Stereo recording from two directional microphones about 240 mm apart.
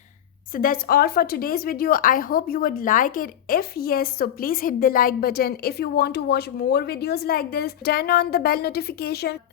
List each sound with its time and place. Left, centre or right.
0.5 s speech: left